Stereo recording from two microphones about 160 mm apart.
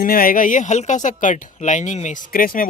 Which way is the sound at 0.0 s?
65° left (ahead or behind).